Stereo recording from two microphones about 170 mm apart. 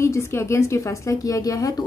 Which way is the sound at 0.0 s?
15° left (ahead or behind).